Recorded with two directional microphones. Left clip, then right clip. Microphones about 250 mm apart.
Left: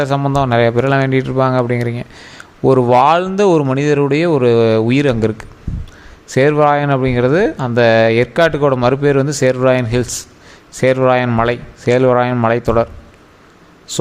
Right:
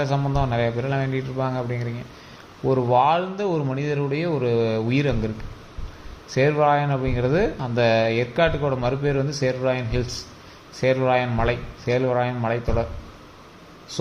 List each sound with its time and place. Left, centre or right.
0.0 s speech: left
6.3 s speech: left